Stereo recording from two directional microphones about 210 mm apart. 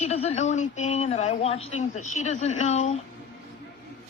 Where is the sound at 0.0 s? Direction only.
30° left (ahead or behind).